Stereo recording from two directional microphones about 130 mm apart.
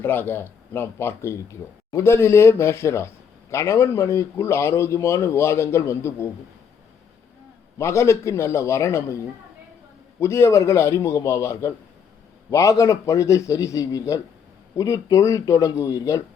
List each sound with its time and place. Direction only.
0.0 s a man's voice: 15° left (ahead or behind)
7.8 s a man's voice: 20° left (ahead or behind)
10.2 s a man's voice: 20° left (ahead or behind)